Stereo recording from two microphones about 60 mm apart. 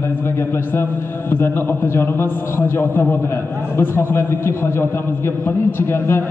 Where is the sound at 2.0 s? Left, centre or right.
Left.